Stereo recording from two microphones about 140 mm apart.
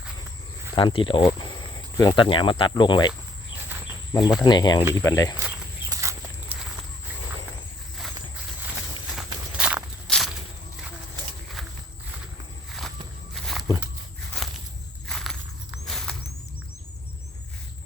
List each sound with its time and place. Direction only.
0.8 s speech: 35° left (ahead or behind)
4.4 s speech: 30° left (ahead or behind)
5.9 s walk: 20° right (ahead or behind)
9.1 s walk: 10° right (ahead or behind)
13.3 s walk: centre (ahead or behind)
15.0 s a sound: 5° left (ahead or behind)